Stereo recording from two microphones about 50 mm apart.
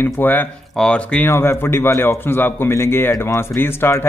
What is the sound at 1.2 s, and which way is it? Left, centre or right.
Speech, left.